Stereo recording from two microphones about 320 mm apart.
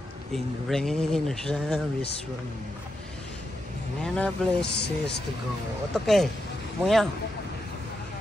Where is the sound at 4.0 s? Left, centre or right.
Centre.